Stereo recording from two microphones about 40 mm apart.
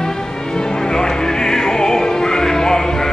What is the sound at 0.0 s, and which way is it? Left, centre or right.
Music, centre.